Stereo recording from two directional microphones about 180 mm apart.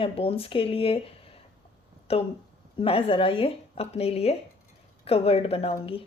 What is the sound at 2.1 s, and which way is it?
A woman's voice, 35° left (ahead or behind).